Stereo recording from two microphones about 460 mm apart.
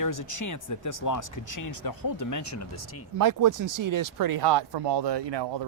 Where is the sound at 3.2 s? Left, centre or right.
Right.